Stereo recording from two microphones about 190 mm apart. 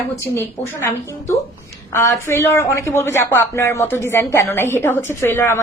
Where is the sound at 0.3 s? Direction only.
15° left (ahead or behind).